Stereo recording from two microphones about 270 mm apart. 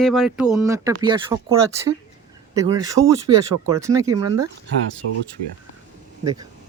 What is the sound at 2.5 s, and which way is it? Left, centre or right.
Speech, centre.